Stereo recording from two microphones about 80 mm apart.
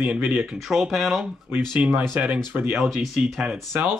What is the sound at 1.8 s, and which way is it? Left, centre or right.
Speech, centre.